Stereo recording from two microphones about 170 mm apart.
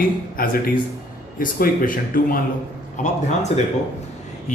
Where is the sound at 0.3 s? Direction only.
60° left (ahead or behind).